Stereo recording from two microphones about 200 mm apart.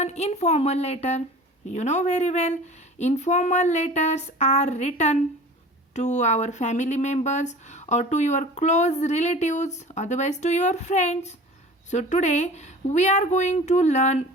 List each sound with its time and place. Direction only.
0.0 s speech: 35° left (ahead or behind)